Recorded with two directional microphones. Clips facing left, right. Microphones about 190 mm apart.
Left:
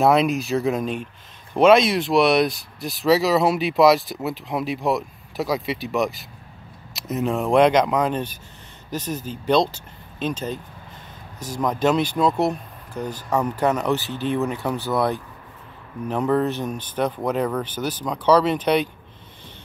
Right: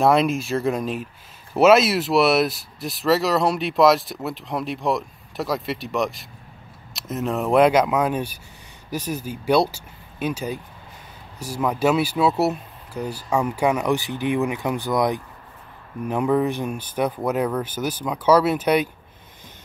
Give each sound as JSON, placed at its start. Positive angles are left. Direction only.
{"t": 0.0, "sound": "speech", "side_deg": 0}